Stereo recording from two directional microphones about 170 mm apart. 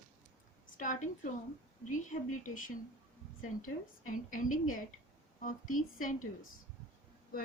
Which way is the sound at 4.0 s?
50° left (ahead or behind).